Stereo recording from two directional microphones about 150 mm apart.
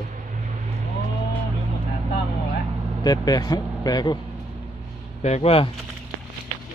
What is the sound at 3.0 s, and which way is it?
A man's voice, 25° left (ahead or behind).